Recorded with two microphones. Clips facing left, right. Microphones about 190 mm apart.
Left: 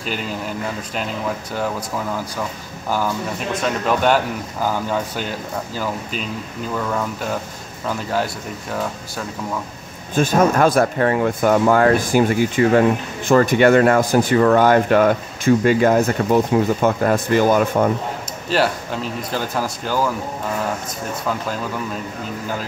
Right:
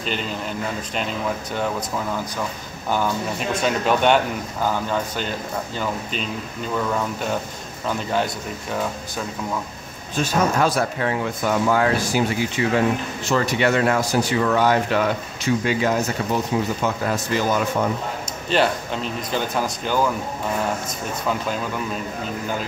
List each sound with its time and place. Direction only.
0.0 s speech: 5° left (ahead or behind)
3.6 s speech: centre (ahead or behind)
6.8 s speech: 5° right (ahead or behind)
10.1 s speech: 55° left (ahead or behind)
18.5 s speech: 5° left (ahead or behind)